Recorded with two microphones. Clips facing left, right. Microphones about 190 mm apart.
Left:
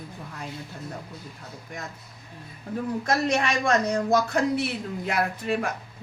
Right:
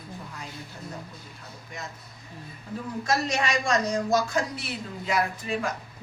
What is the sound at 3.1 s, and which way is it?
Speech, 55° left (ahead or behind).